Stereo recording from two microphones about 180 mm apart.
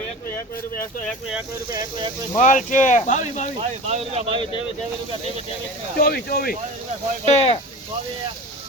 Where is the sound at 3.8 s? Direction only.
35° right (ahead or behind).